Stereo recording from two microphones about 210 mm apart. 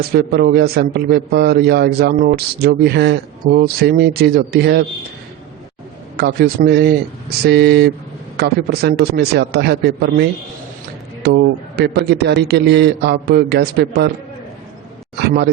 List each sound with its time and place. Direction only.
0.0 s a man's voice: 50° right (ahead or behind)
6.1 s a man's voice: 50° right (ahead or behind)
11.2 s a man's voice: 50° right (ahead or behind)